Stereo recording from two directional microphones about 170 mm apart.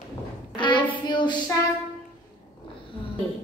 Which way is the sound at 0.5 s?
30° left (ahead or behind).